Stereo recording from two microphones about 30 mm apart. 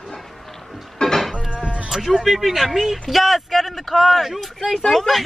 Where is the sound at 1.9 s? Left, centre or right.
Centre.